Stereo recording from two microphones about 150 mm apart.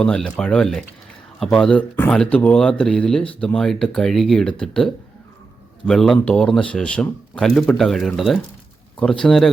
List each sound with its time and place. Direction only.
0.0 s speech: 5° left (ahead or behind)